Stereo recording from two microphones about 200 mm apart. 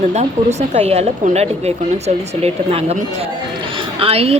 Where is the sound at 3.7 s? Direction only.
25° right (ahead or behind).